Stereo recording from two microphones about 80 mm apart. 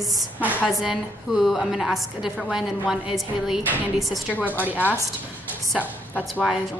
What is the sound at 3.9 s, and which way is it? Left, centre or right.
Speech, centre.